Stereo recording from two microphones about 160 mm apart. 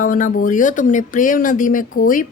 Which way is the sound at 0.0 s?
60° left (ahead or behind).